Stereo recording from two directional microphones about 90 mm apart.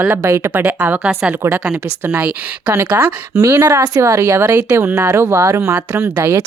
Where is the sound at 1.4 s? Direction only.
30° right (ahead or behind).